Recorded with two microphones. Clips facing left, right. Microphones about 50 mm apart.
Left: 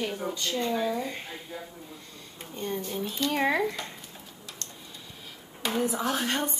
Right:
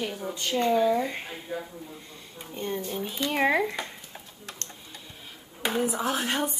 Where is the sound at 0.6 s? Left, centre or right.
Centre.